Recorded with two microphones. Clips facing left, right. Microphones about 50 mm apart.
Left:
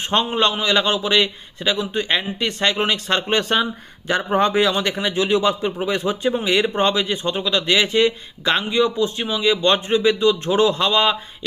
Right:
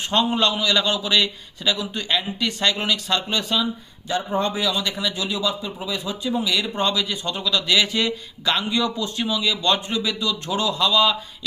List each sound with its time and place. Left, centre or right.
0.0 s a man's voice: left
4.1 s a man's voice: left